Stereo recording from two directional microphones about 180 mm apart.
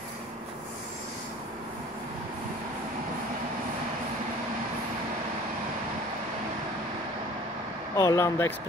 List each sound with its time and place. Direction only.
7.9 s speech: 15° left (ahead or behind)